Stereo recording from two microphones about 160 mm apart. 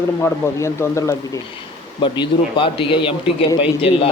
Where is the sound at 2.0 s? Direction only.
30° left (ahead or behind).